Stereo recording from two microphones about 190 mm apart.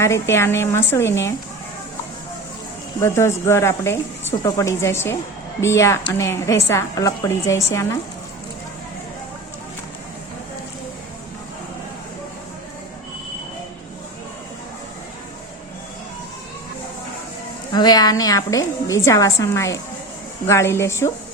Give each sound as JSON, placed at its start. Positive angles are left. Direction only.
{"t": 0.0, "sound": "a woman's voice", "side_deg": 15}
{"t": 3.0, "sound": "a woman's voice", "side_deg": 15}
{"t": 17.7, "sound": "a woman's voice", "side_deg": 20}